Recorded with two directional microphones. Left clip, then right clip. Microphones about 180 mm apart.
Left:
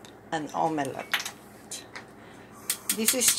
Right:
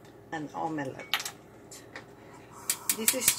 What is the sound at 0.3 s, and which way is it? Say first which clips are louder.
Speech: left 6 dB; 25° left (ahead or behind).